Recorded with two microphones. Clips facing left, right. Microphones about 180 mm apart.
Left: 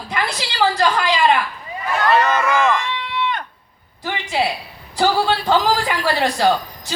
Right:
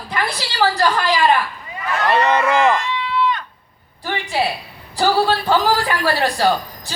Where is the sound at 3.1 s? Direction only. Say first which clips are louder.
Right 5 dB; 65° left (ahead or behind).